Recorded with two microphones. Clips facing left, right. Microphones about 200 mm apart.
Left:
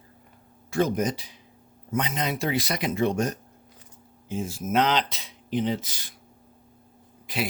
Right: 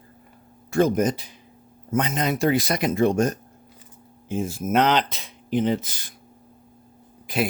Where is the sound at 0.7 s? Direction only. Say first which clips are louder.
Right 4 dB; 50° right (ahead or behind).